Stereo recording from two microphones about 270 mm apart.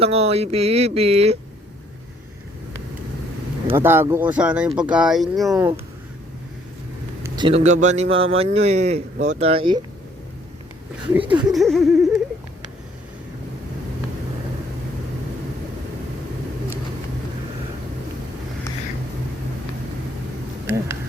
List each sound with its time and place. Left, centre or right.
0.0 s speech: right
3.7 s speech: centre
7.2 s speech: centre
11.2 s speech: centre
11.4 s speech: centre
20.7 s a sound: centre